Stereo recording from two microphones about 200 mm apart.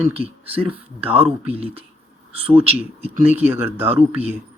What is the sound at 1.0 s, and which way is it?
Speech, 30° right (ahead or behind).